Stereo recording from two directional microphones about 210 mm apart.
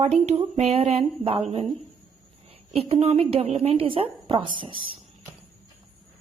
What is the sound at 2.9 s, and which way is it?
Speech, 30° right (ahead or behind).